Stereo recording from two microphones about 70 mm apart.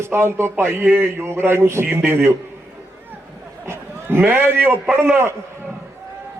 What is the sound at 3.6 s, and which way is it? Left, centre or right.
A man's voice, right.